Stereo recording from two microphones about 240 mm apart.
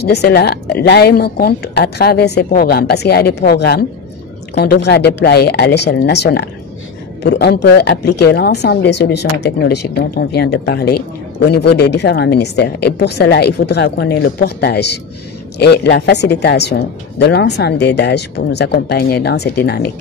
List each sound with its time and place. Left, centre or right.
0.0 s speech: left